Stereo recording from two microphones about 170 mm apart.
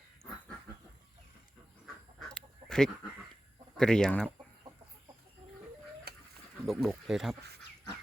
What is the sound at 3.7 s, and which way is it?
Speech, 5° left (ahead or behind).